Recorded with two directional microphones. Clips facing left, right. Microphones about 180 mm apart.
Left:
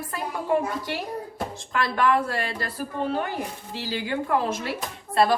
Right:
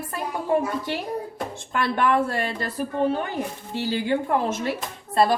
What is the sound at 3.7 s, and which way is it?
Speech, 25° right (ahead or behind).